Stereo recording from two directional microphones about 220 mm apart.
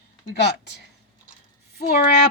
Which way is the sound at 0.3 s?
50° left (ahead or behind).